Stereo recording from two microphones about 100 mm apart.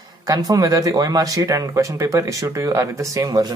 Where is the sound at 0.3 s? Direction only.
35° right (ahead or behind).